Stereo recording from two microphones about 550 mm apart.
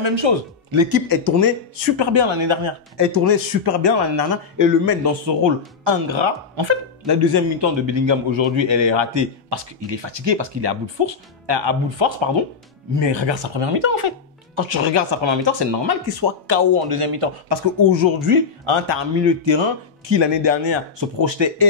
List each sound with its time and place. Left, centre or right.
0.0 s speech: right
0.7 s speech: right
2.0 s speech: right
3.2 s speech: right
17.5 s speech: right